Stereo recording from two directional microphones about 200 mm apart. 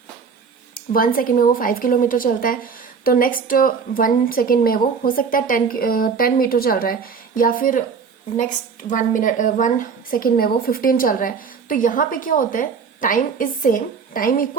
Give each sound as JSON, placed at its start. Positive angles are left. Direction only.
{"t": 0.7, "sound": "a woman's voice", "side_deg": 45}